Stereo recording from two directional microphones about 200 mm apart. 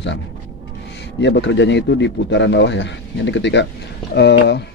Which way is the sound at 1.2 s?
60° left (ahead or behind).